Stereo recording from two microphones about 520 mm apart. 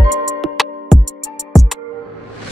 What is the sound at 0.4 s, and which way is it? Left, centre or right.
Music, centre.